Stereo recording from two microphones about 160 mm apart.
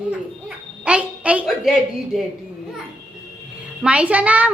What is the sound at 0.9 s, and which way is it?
A woman's voice, 10° right (ahead or behind).